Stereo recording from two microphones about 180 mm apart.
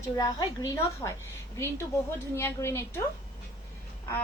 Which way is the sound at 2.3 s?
15° left (ahead or behind).